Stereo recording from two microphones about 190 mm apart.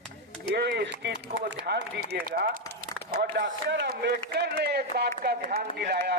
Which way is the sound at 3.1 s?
60° right (ahead or behind).